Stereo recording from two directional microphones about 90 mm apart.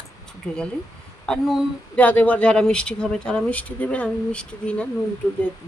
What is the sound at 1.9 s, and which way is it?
Speech, 15° left (ahead or behind).